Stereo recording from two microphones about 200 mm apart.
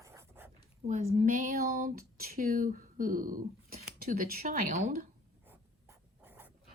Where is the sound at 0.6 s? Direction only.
35° right (ahead or behind).